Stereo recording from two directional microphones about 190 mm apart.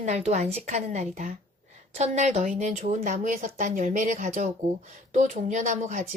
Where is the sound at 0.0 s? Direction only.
35° right (ahead or behind).